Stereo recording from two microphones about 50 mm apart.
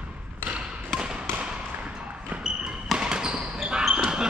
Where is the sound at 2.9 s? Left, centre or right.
Centre.